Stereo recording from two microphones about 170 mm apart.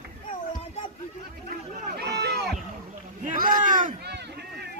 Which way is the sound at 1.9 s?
75° right (ahead or behind).